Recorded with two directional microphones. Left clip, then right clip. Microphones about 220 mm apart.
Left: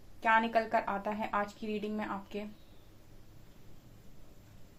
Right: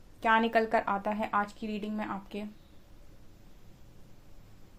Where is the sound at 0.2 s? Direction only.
45° right (ahead or behind).